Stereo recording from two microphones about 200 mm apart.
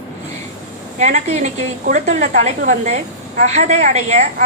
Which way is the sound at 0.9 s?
35° right (ahead or behind).